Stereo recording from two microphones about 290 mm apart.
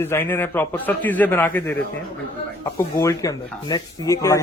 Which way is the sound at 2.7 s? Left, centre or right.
Centre.